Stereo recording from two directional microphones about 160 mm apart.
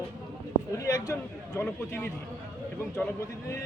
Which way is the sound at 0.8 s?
20° left (ahead or behind).